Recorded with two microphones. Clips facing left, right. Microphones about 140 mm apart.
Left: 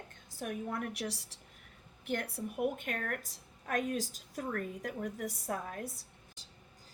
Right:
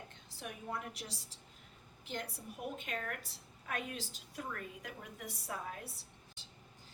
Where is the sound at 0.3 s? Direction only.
50° left (ahead or behind).